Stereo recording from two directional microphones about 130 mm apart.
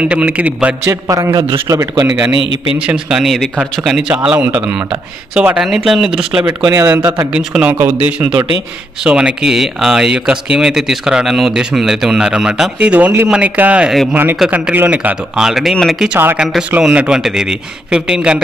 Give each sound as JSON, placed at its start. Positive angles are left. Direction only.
{"t": 0.0, "sound": "a man's voice", "side_deg": -10}
{"t": 0.8, "sound": "a man's voice", "side_deg": -25}
{"t": 2.7, "sound": "a man's voice", "side_deg": -5}
{"t": 6.4, "sound": "a man's voice", "side_deg": -25}
{"t": 7.3, "sound": "a man's voice", "side_deg": -10}
{"t": 16.2, "sound": "a man's voice", "side_deg": -15}